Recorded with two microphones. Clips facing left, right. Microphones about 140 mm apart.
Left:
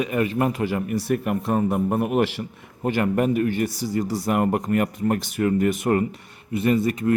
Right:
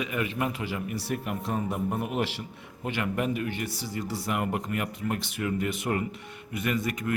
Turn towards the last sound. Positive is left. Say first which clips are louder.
# left 9 dB
turn(degrees=30)  # may be behind; listen again after turning